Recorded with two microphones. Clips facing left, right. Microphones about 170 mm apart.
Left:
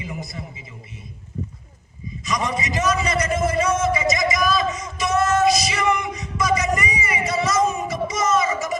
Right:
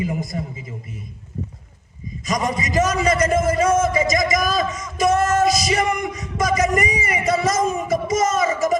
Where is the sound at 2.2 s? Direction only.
45° right (ahead or behind).